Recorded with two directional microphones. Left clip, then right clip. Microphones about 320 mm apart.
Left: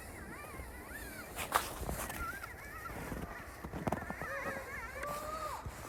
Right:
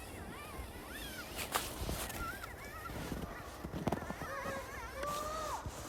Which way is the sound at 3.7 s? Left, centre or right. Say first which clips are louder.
Left 1 dB; centre.